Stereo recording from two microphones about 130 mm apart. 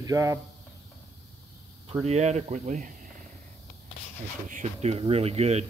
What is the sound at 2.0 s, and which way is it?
Speech, 60° right (ahead or behind).